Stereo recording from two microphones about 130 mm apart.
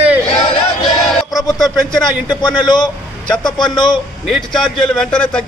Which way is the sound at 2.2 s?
35° left (ahead or behind).